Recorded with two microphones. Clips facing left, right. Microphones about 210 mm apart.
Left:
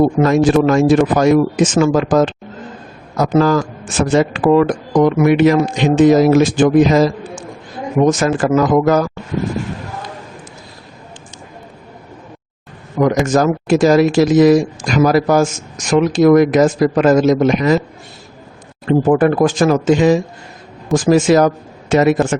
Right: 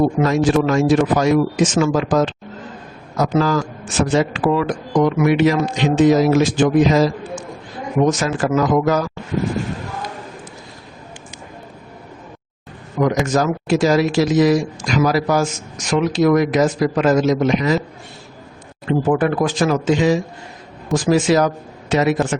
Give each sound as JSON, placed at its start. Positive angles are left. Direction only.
{"t": 0.3, "sound": "speech", "side_deg": 55}
{"t": 13.0, "sound": "speech", "side_deg": 50}
{"t": 18.9, "sound": "speech", "side_deg": 45}